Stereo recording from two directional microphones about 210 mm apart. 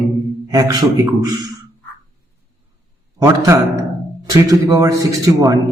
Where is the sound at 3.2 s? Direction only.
15° right (ahead or behind).